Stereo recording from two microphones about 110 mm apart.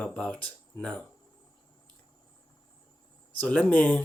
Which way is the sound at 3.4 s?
10° left (ahead or behind).